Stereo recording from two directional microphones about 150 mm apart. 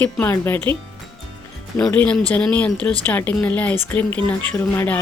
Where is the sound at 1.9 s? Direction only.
10° left (ahead or behind).